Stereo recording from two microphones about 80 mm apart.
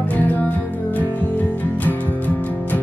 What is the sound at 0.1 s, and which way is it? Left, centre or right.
Music, left.